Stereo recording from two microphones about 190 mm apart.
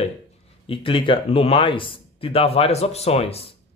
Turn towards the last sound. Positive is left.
turn(degrees=30)  # may be behind; listen again after turning